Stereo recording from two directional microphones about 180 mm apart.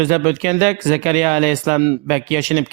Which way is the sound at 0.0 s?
40° right (ahead or behind).